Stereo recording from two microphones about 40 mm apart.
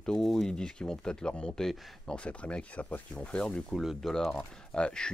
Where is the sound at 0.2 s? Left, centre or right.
Centre; by 3.6 s left.